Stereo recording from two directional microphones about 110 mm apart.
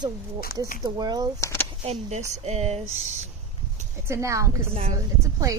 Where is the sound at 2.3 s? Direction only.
85° right.